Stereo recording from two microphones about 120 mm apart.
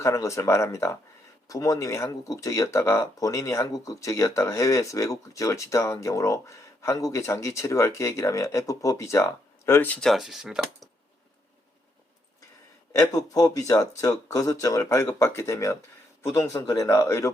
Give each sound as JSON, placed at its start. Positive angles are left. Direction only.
{"t": 0.0, "sound": "speech", "side_deg": 25}
{"t": 12.9, "sound": "speech", "side_deg": 30}